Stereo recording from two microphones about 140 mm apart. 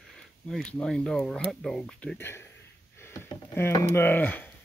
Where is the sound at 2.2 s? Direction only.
15° left (ahead or behind).